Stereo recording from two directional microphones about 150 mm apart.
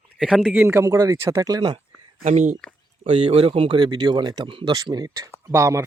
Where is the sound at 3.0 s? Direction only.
40° right (ahead or behind); by 5.8 s 20° right (ahead or behind).